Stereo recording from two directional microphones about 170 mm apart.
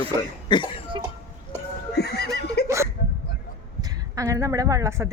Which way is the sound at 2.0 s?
70° left (ahead or behind).